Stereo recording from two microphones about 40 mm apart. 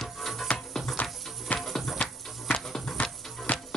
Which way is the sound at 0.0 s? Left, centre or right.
Centre.